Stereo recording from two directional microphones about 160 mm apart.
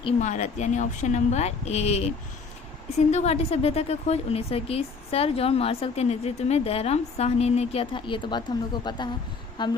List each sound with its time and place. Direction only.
0.2 s a woman's voice: 50° left (ahead or behind); by 9.7 s 30° left (ahead or behind)